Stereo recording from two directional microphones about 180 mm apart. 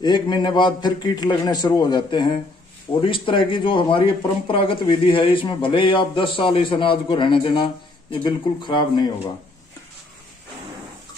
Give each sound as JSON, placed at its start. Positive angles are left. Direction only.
{"t": 0.0, "sound": "a man's voice", "side_deg": 25}